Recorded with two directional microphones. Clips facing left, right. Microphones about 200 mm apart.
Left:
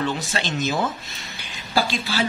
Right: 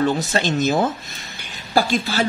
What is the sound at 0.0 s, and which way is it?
Speech, 40° right (ahead or behind).